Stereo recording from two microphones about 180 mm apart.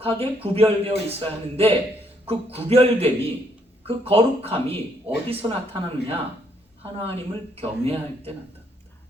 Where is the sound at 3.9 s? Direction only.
30° right (ahead or behind).